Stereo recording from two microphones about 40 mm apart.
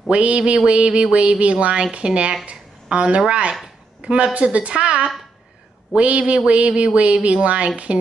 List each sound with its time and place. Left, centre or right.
0.1 s a woman's voice: right
5.9 s a sound: right
6.3 s a woman's voice: right